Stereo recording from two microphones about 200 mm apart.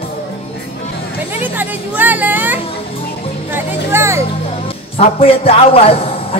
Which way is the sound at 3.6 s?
15° right (ahead or behind).